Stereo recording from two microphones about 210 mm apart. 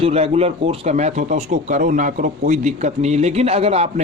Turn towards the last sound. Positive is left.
turn(degrees=-30)  # may be behind; listen again after turning